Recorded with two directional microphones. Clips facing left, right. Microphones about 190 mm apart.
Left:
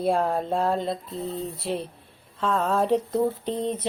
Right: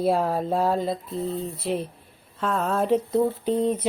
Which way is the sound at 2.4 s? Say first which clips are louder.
Left 1 dB; centre (ahead or behind).